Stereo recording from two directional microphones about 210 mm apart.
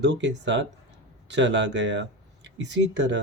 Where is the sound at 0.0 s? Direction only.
55° right (ahead or behind).